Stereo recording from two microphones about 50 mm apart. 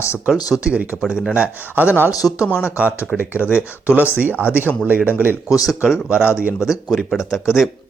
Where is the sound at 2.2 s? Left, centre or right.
Centre.